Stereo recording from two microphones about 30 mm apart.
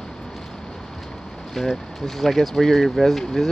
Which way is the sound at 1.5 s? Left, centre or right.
Centre.